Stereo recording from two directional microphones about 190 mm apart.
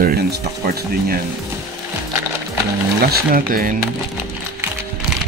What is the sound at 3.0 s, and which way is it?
Speech, 50° right (ahead or behind).